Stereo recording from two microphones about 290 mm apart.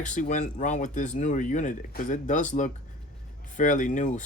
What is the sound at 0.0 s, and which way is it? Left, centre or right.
Speech, left.